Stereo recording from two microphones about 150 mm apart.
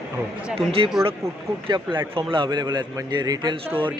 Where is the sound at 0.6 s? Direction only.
40° right (ahead or behind).